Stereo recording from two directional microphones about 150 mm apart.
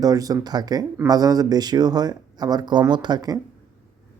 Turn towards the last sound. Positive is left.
turn(degrees=-25)  # may be behind; listen again after turning